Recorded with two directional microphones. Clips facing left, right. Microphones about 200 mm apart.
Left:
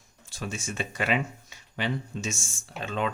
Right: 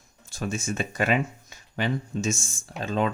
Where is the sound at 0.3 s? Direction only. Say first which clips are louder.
Right 5 dB; 45° right (ahead or behind).